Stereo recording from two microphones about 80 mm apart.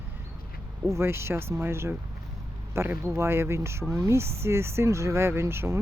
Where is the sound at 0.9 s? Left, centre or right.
Right.